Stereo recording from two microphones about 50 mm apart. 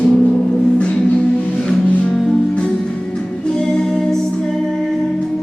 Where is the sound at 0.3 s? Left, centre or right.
Centre.